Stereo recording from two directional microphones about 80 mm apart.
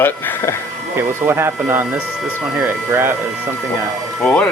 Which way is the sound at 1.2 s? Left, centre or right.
Right.